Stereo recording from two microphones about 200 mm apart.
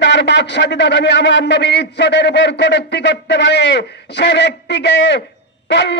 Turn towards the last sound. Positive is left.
turn(degrees=60)  # may be behind; listen again after turning